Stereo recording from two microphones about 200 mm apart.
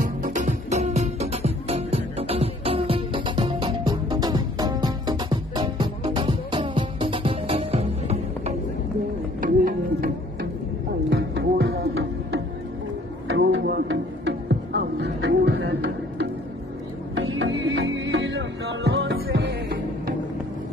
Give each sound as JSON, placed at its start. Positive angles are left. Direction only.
{"t": 0.0, "sound": "music", "side_deg": -40}
{"t": 9.4, "sound": "music", "side_deg": -45}
{"t": 11.1, "sound": "music", "side_deg": -60}
{"t": 13.3, "sound": "music", "side_deg": -60}
{"t": 17.1, "sound": "music", "side_deg": -60}
{"t": 19.2, "sound": "music", "side_deg": -55}